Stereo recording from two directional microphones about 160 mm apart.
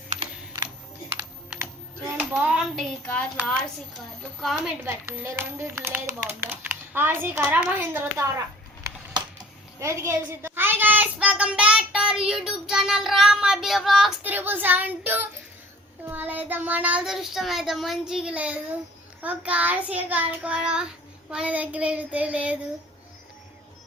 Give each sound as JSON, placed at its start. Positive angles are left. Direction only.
{"t": 0.2, "sound": "camera", "side_deg": -25}
{"t": 1.1, "sound": "computer keyboard", "side_deg": -15}
{"t": 2.1, "sound": "speech", "side_deg": -5}
{"t": 4.2, "sound": "a woman's voice", "side_deg": 0}
{"t": 4.6, "sound": "a woman's voice", "side_deg": -10}
{"t": 9.8, "sound": "a child's voice", "side_deg": -20}
{"t": 14.3, "sound": "a woman's voice", "side_deg": -10}